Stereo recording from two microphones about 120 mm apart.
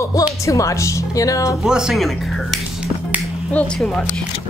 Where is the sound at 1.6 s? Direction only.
5° right (ahead or behind).